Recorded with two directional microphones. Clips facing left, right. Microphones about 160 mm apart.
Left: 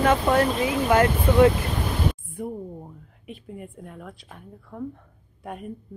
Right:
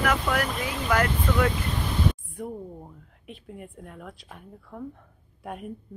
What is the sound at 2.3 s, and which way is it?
Speech, 5° left (ahead or behind).